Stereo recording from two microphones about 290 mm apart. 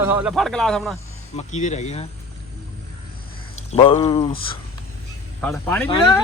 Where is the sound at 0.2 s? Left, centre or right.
Centre.